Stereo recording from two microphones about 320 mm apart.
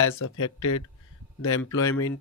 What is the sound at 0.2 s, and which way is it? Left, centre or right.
Speech, left.